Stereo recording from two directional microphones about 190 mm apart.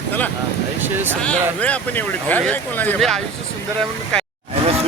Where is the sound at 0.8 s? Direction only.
10° right (ahead or behind).